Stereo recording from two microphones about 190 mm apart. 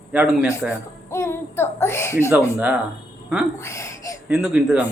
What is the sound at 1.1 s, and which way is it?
Child singing, 15° left (ahead or behind).